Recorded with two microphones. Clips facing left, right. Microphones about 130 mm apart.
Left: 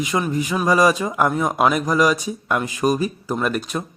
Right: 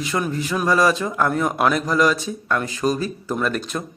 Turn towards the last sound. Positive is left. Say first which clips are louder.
# left 1 dB
turn(degrees=5)  # may be behind; listen again after turning